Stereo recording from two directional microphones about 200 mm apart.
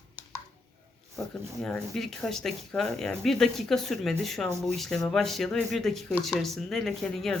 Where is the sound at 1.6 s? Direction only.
Centre (ahead or behind).